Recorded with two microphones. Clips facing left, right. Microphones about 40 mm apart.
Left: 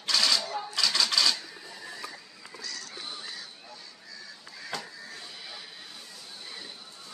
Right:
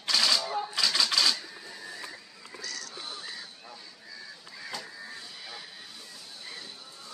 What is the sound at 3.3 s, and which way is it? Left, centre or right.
Honk, centre.